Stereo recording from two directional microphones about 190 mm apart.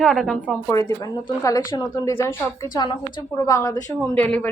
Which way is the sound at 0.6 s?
15° left (ahead or behind).